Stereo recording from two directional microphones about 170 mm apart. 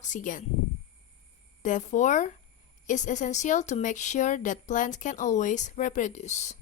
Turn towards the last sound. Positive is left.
turn(degrees=40)  # may be behind; listen again after turning